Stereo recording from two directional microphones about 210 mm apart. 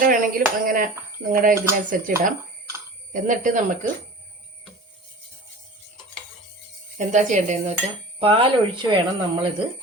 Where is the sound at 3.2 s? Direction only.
40° right (ahead or behind).